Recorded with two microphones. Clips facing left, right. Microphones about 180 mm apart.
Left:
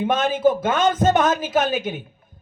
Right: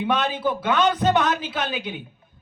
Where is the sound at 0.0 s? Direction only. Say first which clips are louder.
Left 5 dB; 45° left (ahead or behind).